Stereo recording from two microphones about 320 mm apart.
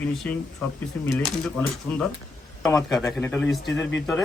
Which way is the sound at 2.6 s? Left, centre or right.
Centre.